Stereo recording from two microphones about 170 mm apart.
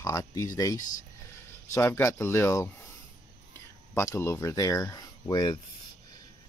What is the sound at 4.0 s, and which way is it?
Speech, 15° left (ahead or behind).